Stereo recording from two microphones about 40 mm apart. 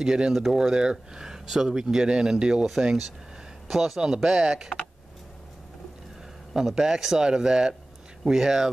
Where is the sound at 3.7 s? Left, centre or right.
Centre.